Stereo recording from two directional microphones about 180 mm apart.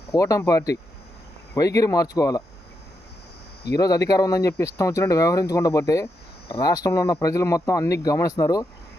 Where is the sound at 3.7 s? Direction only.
20° left (ahead or behind).